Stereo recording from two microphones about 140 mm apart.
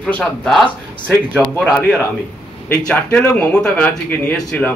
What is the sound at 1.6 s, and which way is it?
Speech, 10° right (ahead or behind).